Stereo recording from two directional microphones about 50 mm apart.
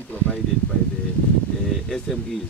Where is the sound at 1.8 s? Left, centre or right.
Centre.